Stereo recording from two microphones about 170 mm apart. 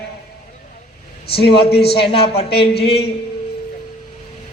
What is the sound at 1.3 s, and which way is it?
A man's voice, 70° left (ahead or behind).